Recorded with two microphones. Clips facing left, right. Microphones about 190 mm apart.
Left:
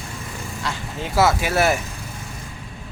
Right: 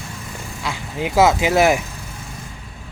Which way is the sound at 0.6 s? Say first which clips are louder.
Right 5 dB; 15° right (ahead or behind).